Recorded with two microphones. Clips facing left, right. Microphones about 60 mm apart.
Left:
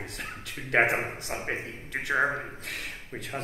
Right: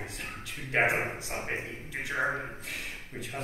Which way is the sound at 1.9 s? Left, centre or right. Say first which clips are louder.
Left 5 dB; left.